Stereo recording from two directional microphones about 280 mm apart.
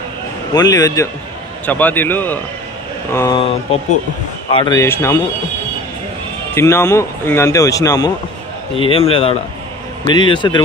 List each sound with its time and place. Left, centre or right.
0.6 s speech: centre
6.5 s a man's voice: centre